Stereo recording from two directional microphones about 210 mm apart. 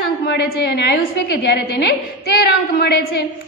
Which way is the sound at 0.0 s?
50° left (ahead or behind).